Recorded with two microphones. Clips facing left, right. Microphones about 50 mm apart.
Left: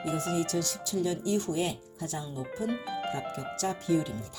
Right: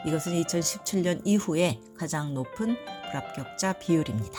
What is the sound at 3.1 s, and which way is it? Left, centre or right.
Speech, right.